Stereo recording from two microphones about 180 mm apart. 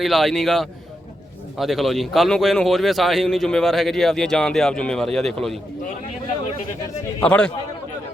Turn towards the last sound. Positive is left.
turn(degrees=5)  # may be behind; listen again after turning